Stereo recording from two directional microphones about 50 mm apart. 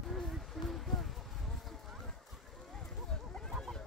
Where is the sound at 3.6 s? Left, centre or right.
Centre.